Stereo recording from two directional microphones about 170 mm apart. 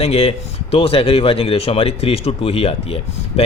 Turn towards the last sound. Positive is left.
turn(degrees=35)  # may be behind; listen again after turning